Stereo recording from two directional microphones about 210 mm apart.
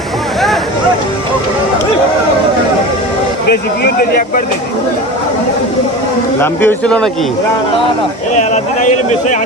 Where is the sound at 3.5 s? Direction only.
45° left (ahead or behind).